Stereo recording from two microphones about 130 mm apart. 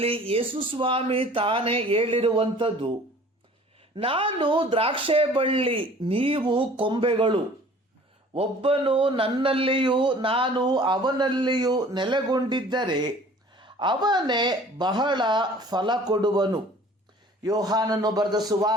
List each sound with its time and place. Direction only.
0.0 s speech: 45° right (ahead or behind)
3.9 s speech: 45° right (ahead or behind)